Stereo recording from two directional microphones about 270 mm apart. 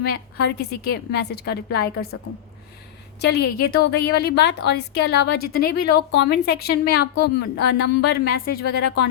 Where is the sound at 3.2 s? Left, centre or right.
Left.